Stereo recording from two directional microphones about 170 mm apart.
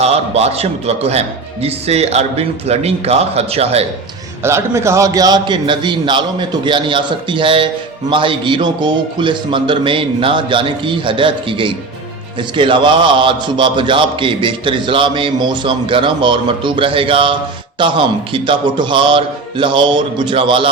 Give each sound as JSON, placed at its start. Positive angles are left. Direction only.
{"t": 0.0, "sound": "speech", "side_deg": -40}
{"t": 4.4, "sound": "a man's voice", "side_deg": -15}